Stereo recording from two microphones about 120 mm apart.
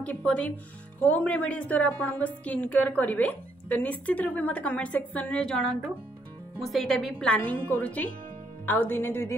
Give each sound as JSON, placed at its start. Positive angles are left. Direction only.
{"t": 0.0, "sound": "a woman's voice", "side_deg": 10}